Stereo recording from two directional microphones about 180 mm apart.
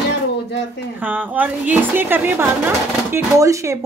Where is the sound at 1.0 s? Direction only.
10° right (ahead or behind).